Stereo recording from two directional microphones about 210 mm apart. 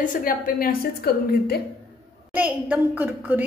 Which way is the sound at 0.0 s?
40° left (ahead or behind).